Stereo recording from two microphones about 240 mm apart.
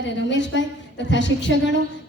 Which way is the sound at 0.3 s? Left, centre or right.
Left.